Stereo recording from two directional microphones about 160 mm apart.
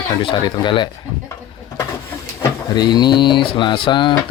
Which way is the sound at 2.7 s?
25° left (ahead or behind).